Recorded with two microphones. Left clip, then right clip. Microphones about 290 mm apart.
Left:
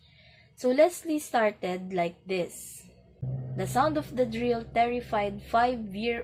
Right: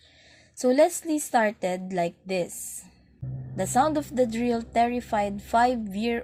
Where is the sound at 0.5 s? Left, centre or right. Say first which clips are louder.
Right 2 dB; right.